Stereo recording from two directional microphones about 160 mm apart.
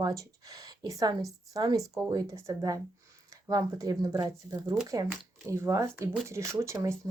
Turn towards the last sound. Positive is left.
turn(degrees=-20)  # may be behind; listen again after turning